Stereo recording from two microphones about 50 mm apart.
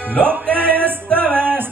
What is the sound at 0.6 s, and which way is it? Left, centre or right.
Music, right.